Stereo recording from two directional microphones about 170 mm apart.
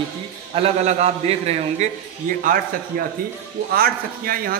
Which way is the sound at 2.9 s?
60° right (ahead or behind).